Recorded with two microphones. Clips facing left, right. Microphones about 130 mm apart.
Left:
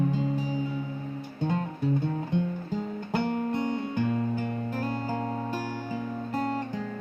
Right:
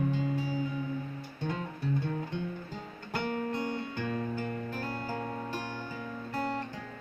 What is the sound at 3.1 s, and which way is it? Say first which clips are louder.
Music: left 5 dB; 20° left (ahead or behind).